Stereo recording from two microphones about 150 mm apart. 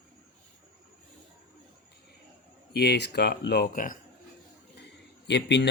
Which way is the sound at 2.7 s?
90° left.